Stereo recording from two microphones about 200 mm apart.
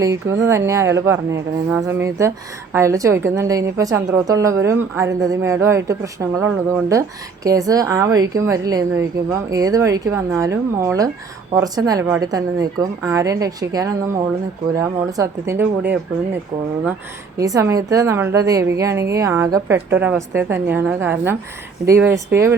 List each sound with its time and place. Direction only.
0.0 s a woman's voice: 15° right (ahead or behind)